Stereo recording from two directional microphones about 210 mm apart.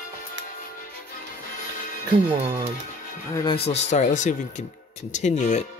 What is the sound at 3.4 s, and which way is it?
Speech, 30° left (ahead or behind).